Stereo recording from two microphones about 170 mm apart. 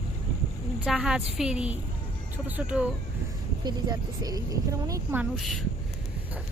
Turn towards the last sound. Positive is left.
turn(degrees=0)  # may be behind; listen again after turning